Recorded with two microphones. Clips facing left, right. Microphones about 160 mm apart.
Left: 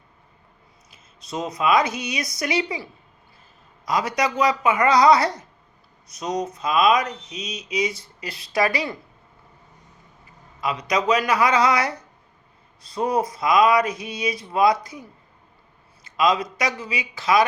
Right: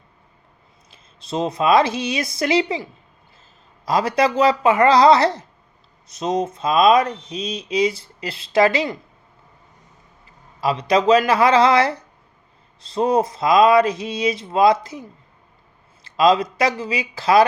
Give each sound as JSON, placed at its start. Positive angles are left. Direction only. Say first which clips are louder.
{"t": 0.9, "sound": "speech", "louder": "right 5 dB", "side_deg": -30}
{"t": 3.8, "sound": "speech", "louder": "right 5 dB", "side_deg": -30}
{"t": 10.6, "sound": "speech", "louder": "right 6 dB", "side_deg": -30}
{"t": 16.0, "sound": "speech", "louder": "right 5 dB", "side_deg": -30}